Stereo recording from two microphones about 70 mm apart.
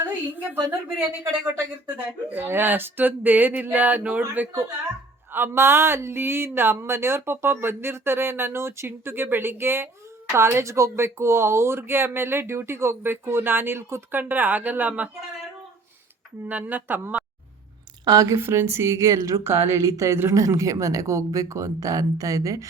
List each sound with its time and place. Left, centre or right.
0.0 s a sound: right
0.9 s speech: right
5.3 s speech: right
16.5 s speech: right
18.0 s speech: right
18.3 s speech: right